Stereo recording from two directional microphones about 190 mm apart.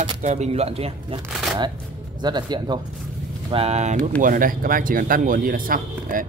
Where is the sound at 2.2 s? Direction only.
25° right (ahead or behind).